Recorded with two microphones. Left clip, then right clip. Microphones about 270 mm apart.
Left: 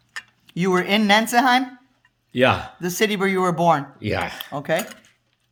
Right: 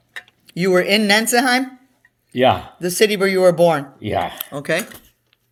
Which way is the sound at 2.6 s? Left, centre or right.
Centre.